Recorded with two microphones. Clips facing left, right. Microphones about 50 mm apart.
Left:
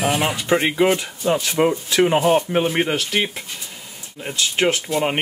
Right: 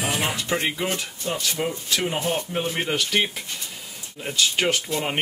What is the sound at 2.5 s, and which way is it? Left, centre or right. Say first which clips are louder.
Speech: left 7 dB; left.